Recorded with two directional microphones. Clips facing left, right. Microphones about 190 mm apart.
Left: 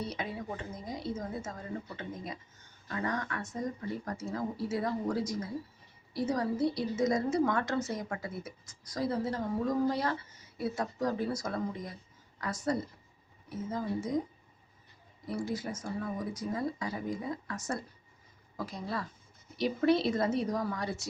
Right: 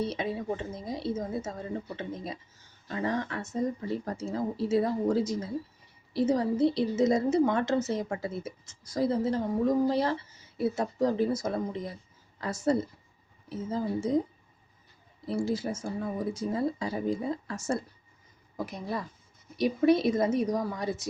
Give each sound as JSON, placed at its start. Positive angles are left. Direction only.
{"t": 0.0, "sound": "a woman's voice", "side_deg": -25}
{"t": 15.3, "sound": "a woman's voice", "side_deg": -30}